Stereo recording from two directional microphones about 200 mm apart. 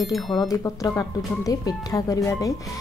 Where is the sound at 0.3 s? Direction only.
20° left (ahead or behind).